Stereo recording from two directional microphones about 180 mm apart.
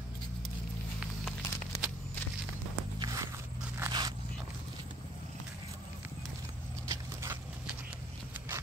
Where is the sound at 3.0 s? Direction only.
20° right (ahead or behind).